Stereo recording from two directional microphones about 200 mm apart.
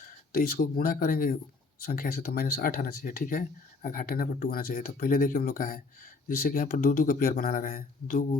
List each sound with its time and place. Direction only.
0.3 s a man's voice: 50° left (ahead or behind)